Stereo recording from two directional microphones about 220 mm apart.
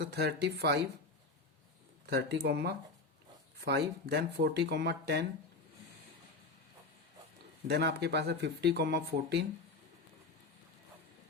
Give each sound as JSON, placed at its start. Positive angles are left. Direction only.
{"t": 0.0, "sound": "speech", "side_deg": -50}
{"t": 2.0, "sound": "speech", "side_deg": -50}
{"t": 7.7, "sound": "speech", "side_deg": -50}